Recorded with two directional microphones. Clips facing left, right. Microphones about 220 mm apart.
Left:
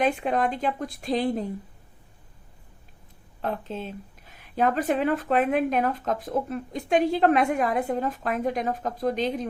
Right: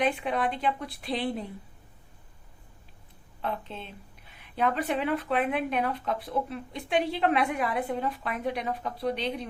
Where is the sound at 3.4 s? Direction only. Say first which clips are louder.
Left 4 dB; 45° left (ahead or behind).